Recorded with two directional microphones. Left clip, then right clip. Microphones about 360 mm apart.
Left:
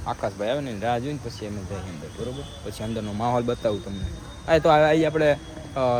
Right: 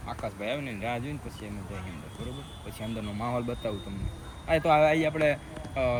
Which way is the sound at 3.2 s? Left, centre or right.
Centre.